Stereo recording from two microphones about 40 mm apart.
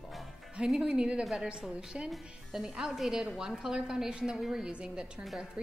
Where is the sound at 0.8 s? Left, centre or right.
Right; by 4.7 s centre.